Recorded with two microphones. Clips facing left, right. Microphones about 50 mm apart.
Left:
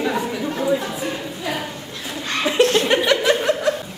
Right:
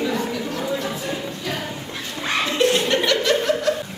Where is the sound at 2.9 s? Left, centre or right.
Centre.